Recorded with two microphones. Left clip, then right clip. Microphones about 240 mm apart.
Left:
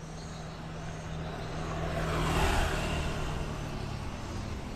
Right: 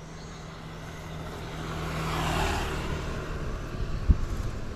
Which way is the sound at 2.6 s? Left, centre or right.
Left.